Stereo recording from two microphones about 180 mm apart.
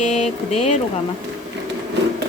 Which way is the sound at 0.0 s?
35° left (ahead or behind).